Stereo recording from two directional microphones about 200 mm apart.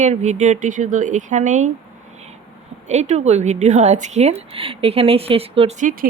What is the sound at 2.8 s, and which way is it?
A woman's voice, 35° right (ahead or behind).